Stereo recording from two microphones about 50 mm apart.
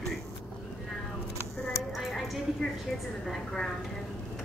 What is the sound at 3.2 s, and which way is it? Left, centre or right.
Speech, centre.